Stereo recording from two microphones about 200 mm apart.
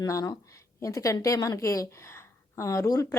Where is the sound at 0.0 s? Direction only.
15° left (ahead or behind).